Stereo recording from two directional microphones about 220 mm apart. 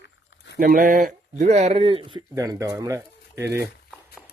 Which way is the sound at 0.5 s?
40° right (ahead or behind).